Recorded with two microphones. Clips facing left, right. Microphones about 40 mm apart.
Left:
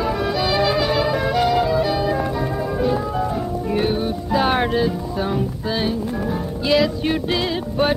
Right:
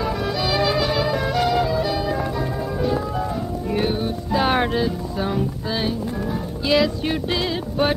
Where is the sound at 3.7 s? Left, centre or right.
Centre.